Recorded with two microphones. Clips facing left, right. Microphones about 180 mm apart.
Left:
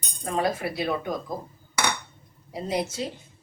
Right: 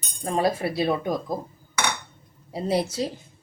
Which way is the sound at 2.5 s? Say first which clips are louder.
Right 4 dB; 30° right (ahead or behind).